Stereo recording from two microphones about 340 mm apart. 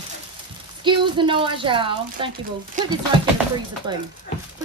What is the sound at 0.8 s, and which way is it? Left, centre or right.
Speech, centre.